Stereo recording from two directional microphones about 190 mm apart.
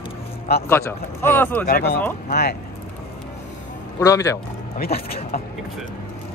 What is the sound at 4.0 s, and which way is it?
Speech, 15° left (ahead or behind).